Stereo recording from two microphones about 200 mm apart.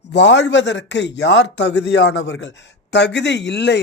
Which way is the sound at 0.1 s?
60° left (ahead or behind).